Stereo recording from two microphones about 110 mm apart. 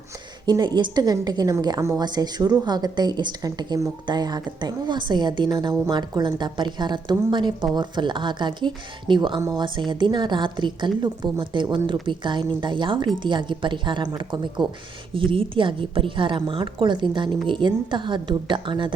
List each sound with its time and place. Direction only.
0.4 s a woman's voice: 40° right (ahead or behind)